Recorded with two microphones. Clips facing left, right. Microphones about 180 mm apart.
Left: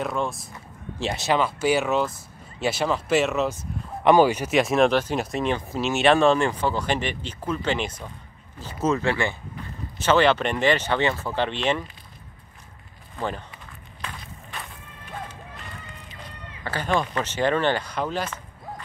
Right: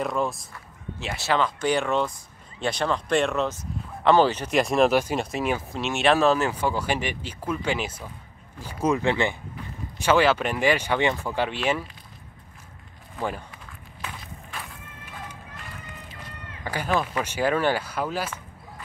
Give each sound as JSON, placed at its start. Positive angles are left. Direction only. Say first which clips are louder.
{"t": 0.0, "sound": "speech", "louder": "right 1 dB", "side_deg": 0}
{"t": 1.1, "sound": "speech", "louder": "left 1 dB", "side_deg": 15}
{"t": 13.2, "sound": "speech", "louder": "even", "side_deg": -10}
{"t": 14.0, "sound": "walk", "louder": "even", "side_deg": 0}
{"t": 16.6, "sound": "speech", "louder": "left 1 dB", "side_deg": -10}